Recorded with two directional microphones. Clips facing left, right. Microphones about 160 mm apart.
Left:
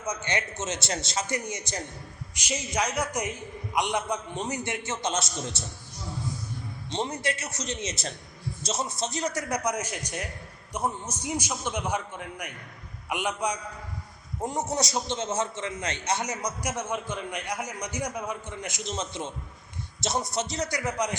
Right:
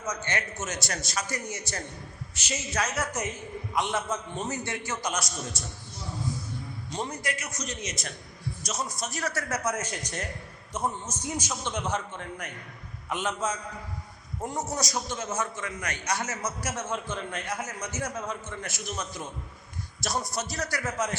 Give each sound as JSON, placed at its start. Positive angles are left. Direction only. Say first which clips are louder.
{"t": 0.0, "sound": "a man's voice", "louder": "left 2 dB", "side_deg": 20}
{"t": 6.9, "sound": "a man's voice", "louder": "left 3 dB", "side_deg": 25}